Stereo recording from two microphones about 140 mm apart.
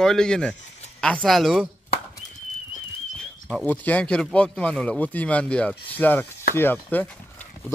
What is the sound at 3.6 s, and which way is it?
Speech, 10° left (ahead or behind).